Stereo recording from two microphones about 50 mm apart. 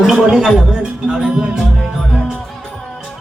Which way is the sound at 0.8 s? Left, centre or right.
Centre.